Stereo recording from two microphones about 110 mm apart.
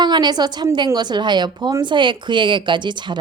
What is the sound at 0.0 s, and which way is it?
A woman's voice, 40° right (ahead or behind).